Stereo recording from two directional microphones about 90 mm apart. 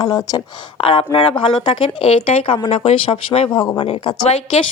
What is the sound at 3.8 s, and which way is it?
Speech, 75° left (ahead or behind).